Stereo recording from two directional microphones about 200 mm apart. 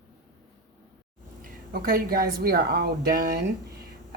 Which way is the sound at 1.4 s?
45° right (ahead or behind).